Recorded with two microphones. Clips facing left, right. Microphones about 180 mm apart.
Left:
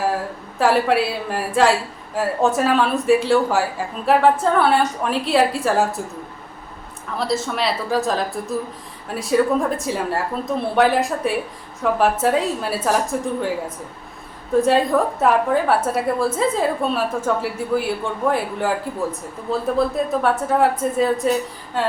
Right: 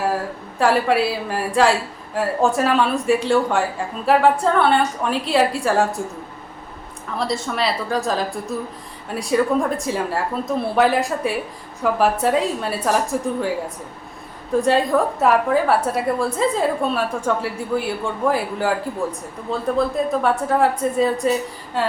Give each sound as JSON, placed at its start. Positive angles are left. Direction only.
{"t": 0.6, "sound": "a woman's voice", "side_deg": 0}
{"t": 7.2, "sound": "a woman's voice", "side_deg": 0}
{"t": 14.6, "sound": "a woman's voice", "side_deg": 0}
{"t": 20.2, "sound": "a woman's voice", "side_deg": 0}